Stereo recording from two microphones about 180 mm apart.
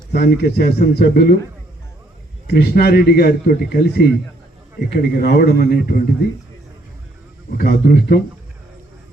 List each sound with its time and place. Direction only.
0.1 s speech: 65° left (ahead or behind)
2.5 s speech: 60° left (ahead or behind)
7.5 s speech: 55° left (ahead or behind)